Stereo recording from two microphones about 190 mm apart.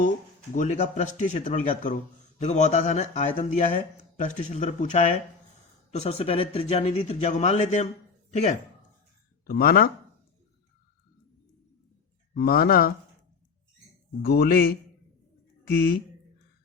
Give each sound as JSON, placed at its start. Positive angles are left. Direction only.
{"t": 0.5, "sound": "speech", "side_deg": 40}
{"t": 9.5, "sound": "speech", "side_deg": 50}
{"t": 12.3, "sound": "speech", "side_deg": 50}
{"t": 14.2, "sound": "a man's voice", "side_deg": 55}